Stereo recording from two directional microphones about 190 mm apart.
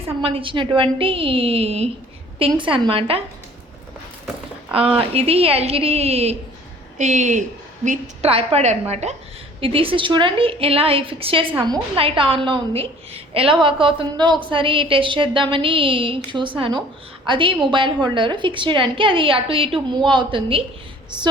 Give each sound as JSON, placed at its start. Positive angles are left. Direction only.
{"t": 0.2, "sound": "a woman's voice", "side_deg": -30}
{"t": 4.9, "sound": "a woman's voice", "side_deg": -30}